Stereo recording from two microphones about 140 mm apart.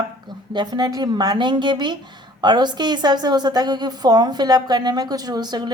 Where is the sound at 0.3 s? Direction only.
30° right (ahead or behind).